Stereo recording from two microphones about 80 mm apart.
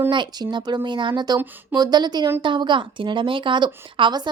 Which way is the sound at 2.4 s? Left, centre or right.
Right.